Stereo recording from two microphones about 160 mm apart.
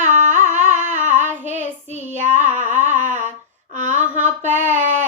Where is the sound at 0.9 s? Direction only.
50° right (ahead or behind).